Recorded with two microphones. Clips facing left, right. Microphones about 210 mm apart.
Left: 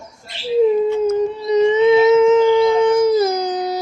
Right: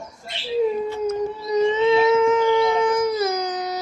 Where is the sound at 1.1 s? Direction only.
20° left (ahead or behind).